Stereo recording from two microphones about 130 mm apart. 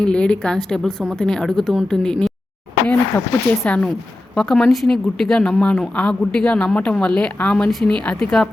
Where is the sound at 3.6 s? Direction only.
10° left (ahead or behind).